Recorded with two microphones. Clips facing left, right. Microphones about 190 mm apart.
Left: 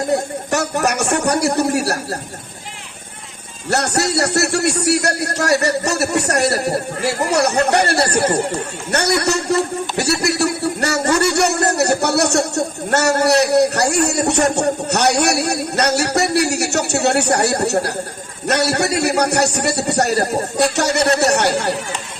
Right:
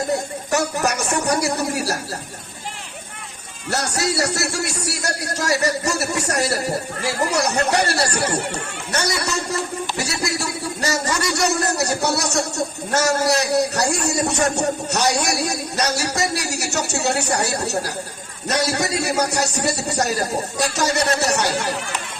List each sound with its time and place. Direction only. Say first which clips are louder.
0.1 s a sound: left 3 dB; 65° left (ahead or behind)
3.7 s a man's voice: left 4 dB; 65° left (ahead or behind)
8.9 s a man's voice: left 6 dB; 65° left (ahead or behind)